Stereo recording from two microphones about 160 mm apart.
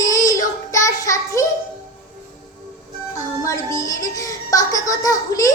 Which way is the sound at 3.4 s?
20° left (ahead or behind).